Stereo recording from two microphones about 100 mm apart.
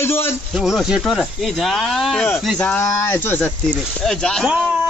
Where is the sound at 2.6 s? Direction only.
10° left (ahead or behind).